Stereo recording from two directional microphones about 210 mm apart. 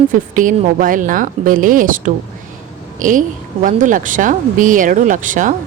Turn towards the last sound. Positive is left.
turn(degrees=-40)  # may be behind; listen again after turning